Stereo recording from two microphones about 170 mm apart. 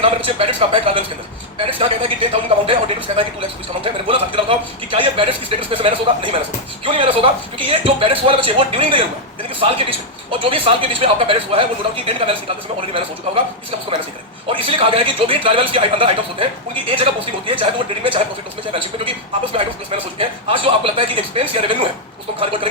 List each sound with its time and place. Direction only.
0.3 s a man's voice: 35° right (ahead or behind)